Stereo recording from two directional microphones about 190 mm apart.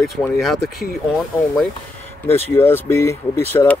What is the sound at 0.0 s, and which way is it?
Speech, centre (ahead or behind).